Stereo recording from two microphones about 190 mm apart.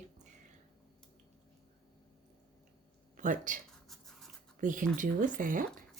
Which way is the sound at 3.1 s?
45° right (ahead or behind).